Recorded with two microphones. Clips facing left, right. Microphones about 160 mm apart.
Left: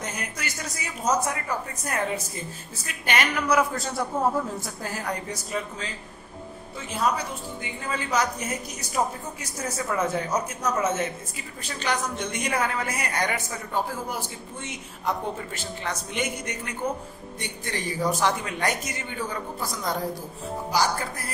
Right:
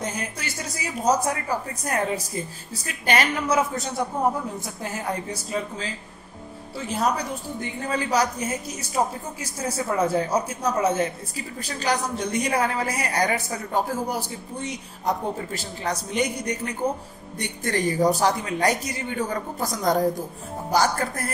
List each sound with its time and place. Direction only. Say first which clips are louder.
0.0 s a woman's voice: right 3 dB; 30° right (ahead or behind)
7.8 s a woman's voice: right 3 dB; 35° right (ahead or behind)